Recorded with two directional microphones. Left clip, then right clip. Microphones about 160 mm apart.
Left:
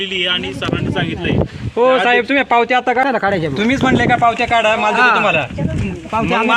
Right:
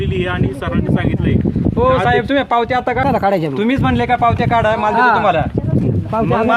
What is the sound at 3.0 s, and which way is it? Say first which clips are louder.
Speech: right 1 dB; 90° right.